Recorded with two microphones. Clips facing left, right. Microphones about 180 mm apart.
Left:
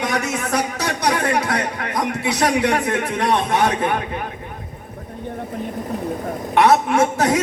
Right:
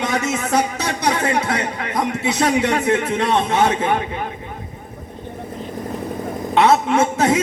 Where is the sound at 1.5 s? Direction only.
45° left (ahead or behind).